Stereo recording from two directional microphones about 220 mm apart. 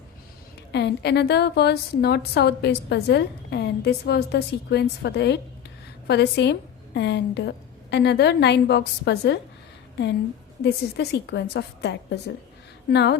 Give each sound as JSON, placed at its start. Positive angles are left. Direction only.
{"t": 0.7, "sound": "a woman's voice", "side_deg": 50}
{"t": 10.6, "sound": "a woman's voice", "side_deg": 50}